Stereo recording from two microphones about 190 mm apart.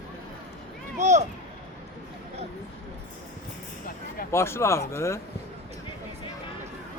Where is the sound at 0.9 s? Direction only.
40° right (ahead or behind).